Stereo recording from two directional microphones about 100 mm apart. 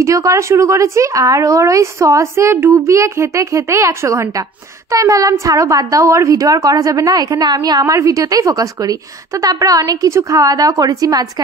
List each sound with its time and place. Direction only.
0.0 s a woman's voice: 35° right (ahead or behind)